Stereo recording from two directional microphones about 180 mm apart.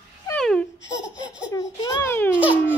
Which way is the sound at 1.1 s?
5° right (ahead or behind).